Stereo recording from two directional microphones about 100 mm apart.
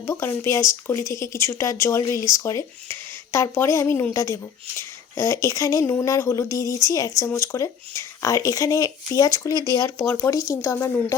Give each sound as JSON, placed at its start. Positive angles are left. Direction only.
{"t": 0.0, "sound": "speech", "side_deg": 25}